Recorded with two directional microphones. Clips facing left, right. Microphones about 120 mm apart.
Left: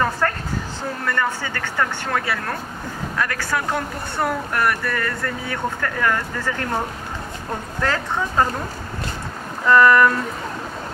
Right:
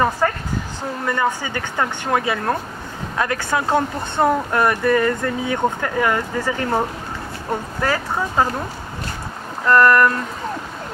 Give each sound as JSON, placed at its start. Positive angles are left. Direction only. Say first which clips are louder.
{"t": 0.2, "sound": "speech", "louder": "right 2 dB", "side_deg": -10}
{"t": 7.8, "sound": "speech", "louder": "even", "side_deg": -10}
{"t": 9.7, "sound": "speech", "louder": "even", "side_deg": 0}